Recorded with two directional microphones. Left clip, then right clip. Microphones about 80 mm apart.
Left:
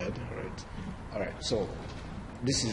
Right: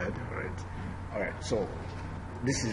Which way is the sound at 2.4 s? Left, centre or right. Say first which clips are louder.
Left 1 dB; left.